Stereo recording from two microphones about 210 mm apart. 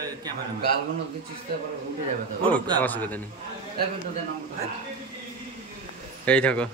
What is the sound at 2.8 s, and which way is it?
Speech, 10° left (ahead or behind).